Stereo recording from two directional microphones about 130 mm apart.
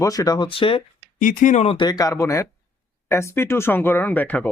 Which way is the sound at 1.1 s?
90° left.